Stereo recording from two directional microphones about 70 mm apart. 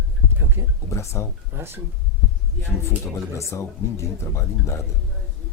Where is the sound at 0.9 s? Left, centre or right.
Left.